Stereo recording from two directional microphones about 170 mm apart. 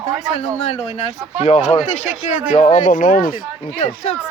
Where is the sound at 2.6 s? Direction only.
50° left (ahead or behind).